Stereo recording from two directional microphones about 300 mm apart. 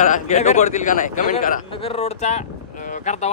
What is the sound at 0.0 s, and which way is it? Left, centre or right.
A man's voice, left.